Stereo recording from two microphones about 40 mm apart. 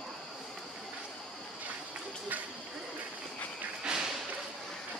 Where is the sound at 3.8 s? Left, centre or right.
Centre.